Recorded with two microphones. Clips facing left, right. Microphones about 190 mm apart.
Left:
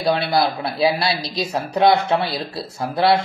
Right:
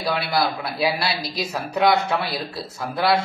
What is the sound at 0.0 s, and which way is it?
Speech, 30° left (ahead or behind).